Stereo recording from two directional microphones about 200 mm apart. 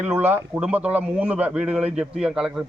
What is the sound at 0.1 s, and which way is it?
A man's voice, 10° right (ahead or behind).